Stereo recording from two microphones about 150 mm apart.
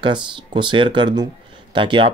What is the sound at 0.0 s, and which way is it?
Speech, 30° right (ahead or behind).